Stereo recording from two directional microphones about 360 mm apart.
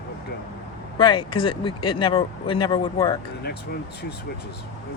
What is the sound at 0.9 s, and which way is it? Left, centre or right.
Speech, centre.